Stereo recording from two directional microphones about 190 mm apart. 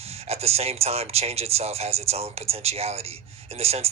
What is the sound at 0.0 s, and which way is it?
Speech, 35° right (ahead or behind).